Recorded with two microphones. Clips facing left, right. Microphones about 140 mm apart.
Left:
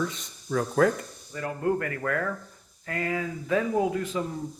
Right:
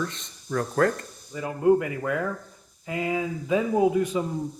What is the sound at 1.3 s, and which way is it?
Speech, 15° right (ahead or behind).